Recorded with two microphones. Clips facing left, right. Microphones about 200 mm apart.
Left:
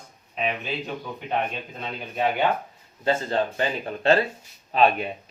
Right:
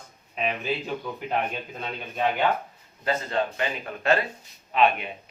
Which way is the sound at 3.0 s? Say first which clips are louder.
Left 3 dB; 30° left (ahead or behind).